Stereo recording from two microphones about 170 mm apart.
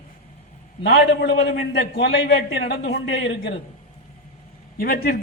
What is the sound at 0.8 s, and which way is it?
A man's voice, 80° left.